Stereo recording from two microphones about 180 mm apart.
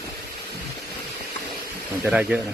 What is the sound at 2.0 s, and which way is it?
Speech, 10° right (ahead or behind).